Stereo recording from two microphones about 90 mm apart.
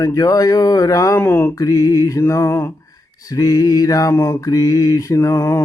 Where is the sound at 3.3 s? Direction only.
40° left (ahead or behind).